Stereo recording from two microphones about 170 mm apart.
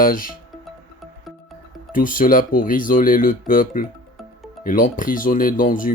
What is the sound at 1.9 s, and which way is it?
Speech, 50° left (ahead or behind).